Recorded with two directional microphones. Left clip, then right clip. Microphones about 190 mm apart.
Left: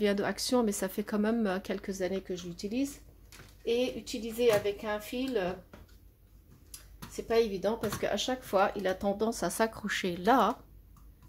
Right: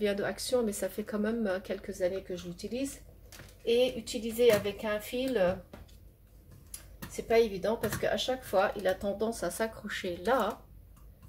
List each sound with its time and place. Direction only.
0.0 s speech: 55° left (ahead or behind)
4.0 s speech: 40° left (ahead or behind)
7.2 s speech: 40° left (ahead or behind)